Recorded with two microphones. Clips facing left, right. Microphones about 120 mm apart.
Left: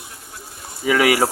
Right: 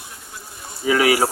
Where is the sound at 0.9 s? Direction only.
90° left.